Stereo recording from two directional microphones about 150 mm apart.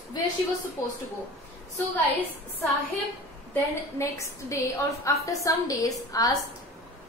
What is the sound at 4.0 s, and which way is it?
A woman's voice, 20° left (ahead or behind).